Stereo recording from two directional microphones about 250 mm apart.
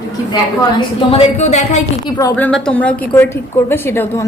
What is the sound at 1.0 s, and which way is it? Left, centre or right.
Speech, left.